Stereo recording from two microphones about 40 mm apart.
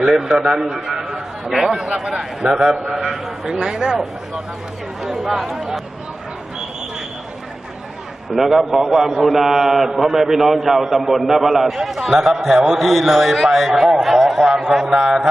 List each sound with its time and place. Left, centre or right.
0.0 s a man's voice: centre
5.0 s speech: centre
8.4 s a man's voice: centre
11.9 s a man's voice: centre